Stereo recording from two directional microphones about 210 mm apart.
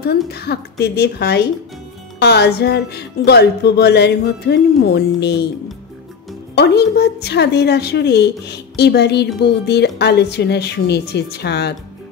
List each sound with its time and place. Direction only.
0.3 s speech: 50° left (ahead or behind)
6.5 s speech: 50° left (ahead or behind)